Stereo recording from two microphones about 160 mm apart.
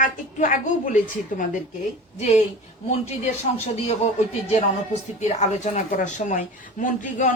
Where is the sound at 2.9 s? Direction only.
45° left (ahead or behind).